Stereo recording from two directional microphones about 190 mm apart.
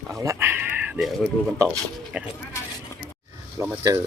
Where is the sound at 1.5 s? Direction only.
15° right (ahead or behind).